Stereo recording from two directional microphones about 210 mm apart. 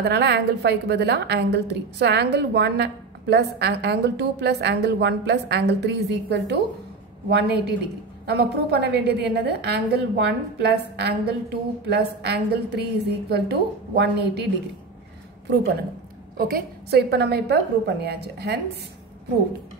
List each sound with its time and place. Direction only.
0.0 s a woman's voice: 50° right (ahead or behind)
16.3 s a woman's voice: 45° right (ahead or behind)